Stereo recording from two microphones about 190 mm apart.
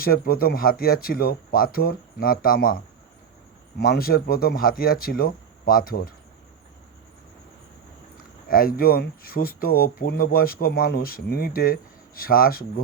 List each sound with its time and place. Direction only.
0.0 s speech: 50° left (ahead or behind)
3.8 s speech: 50° left (ahead or behind)
8.4 s speech: 50° left (ahead or behind)